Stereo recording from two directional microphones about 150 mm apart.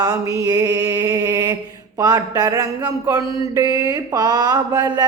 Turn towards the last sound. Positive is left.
turn(degrees=-25)  # may be behind; listen again after turning